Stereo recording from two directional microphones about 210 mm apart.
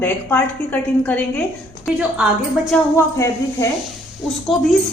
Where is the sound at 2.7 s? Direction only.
15° left (ahead or behind).